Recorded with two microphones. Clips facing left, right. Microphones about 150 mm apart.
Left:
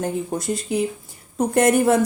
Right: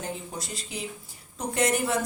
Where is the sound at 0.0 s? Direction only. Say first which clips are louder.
Left 11 dB; 50° left (ahead or behind).